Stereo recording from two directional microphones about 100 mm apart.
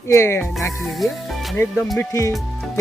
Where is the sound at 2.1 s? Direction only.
30° left (ahead or behind).